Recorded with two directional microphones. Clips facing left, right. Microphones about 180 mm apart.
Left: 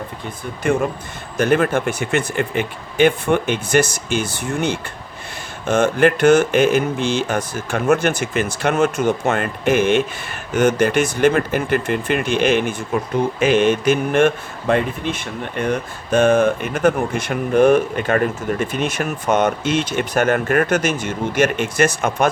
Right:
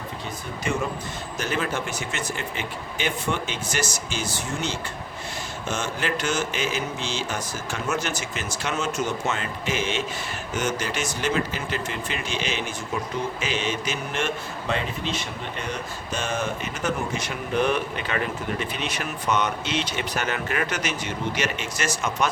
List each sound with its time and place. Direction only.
0.7 s speech: 55° left (ahead or behind)